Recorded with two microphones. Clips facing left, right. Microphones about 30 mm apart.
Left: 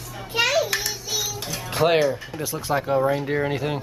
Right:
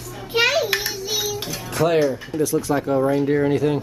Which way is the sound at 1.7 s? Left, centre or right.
Left.